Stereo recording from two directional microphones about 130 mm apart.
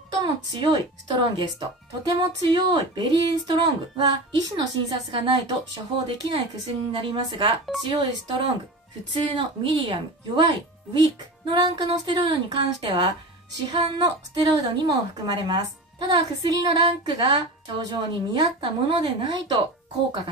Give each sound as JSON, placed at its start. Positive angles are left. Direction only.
{"t": 0.1, "sound": "speech", "side_deg": -35}